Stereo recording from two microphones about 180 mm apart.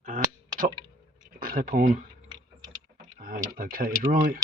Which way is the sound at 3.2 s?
50° right (ahead or behind).